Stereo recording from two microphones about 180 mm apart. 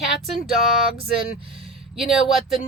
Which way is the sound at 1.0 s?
30° right (ahead or behind).